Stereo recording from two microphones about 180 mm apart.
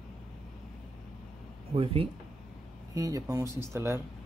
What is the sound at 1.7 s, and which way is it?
Speech, 30° right (ahead or behind).